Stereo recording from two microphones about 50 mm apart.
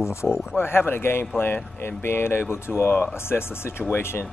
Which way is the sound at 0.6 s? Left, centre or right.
Left.